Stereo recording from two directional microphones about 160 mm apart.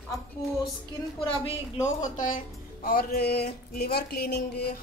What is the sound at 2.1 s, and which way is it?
Speech, 55° left (ahead or behind).